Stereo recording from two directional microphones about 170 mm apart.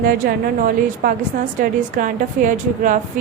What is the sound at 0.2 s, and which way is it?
A woman's voice, 60° right (ahead or behind).